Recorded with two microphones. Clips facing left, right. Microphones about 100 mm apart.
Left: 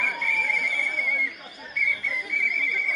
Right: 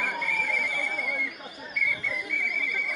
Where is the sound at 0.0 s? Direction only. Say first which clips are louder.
Left 1 dB; 25° right (ahead or behind).